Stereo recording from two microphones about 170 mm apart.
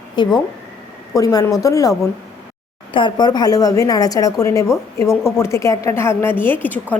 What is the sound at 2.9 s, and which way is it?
A woman's voice, 25° left (ahead or behind).